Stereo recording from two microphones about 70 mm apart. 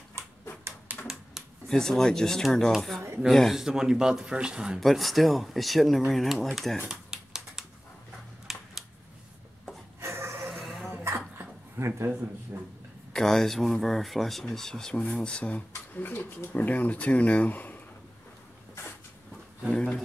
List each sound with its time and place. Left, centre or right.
0.9 s a sound: right
1.4 s a sound: centre
1.7 s speech: centre
3.5 s speech: centre
4.7 s speech: centre
6.9 s a sound: centre
9.9 s a sound: right
10.5 s dog: centre
10.9 s dog: right
12.5 s a man's voice: right
13.1 s speech: centre
15.9 s speech: left
19.7 s speech: centre